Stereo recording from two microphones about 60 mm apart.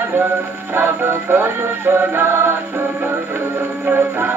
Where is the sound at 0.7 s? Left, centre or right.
Right.